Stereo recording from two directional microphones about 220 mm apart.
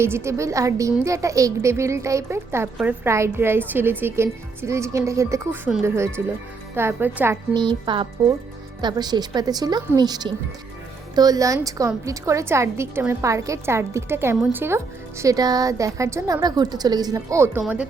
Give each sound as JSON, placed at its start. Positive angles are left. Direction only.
{"t": 0.0, "sound": "a woman's voice", "side_deg": -10}
{"t": 7.5, "sound": "a woman's voice", "side_deg": -20}